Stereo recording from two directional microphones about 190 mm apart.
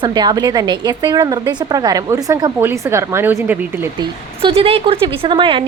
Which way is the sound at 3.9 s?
25° right (ahead or behind).